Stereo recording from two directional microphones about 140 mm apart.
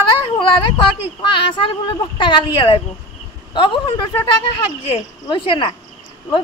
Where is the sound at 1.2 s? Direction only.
35° left (ahead or behind).